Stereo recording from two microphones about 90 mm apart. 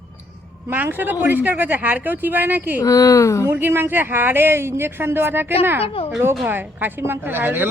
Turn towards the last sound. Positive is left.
turn(degrees=-20)  # may be behind; listen again after turning